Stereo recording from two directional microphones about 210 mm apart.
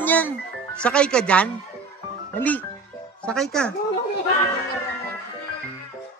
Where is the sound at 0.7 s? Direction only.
5° left (ahead or behind).